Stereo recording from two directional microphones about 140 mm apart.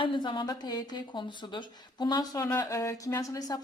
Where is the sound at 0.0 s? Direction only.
35° left (ahead or behind).